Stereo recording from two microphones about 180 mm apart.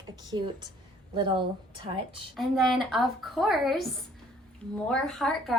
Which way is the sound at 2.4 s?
Centre (ahead or behind).